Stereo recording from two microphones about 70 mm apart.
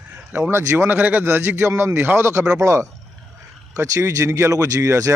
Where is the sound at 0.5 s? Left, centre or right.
Right.